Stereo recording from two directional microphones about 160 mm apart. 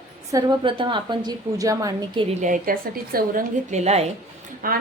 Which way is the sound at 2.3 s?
55° right (ahead or behind).